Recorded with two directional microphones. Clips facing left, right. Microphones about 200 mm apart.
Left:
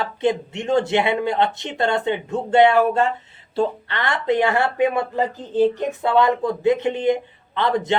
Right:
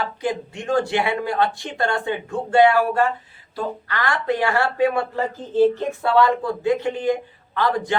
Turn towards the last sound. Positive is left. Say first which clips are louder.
# left 1 dB
turn(degrees=20)  # may be behind; listen again after turning